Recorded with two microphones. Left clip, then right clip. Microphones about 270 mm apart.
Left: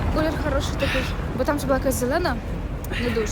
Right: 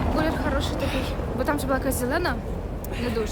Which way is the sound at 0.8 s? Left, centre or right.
Left.